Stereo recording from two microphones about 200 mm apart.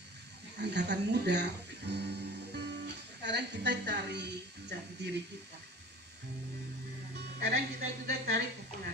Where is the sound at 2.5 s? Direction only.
55° right (ahead or behind).